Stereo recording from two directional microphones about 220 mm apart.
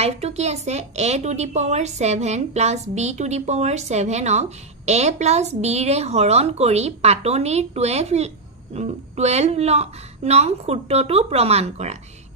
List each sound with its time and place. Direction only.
0.0 s speech: 30° right (ahead or behind)